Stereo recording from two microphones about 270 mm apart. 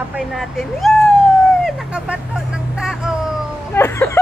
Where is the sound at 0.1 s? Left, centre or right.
Centre.